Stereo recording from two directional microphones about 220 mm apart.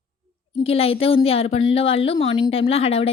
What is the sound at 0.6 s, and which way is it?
Speech, 25° left (ahead or behind).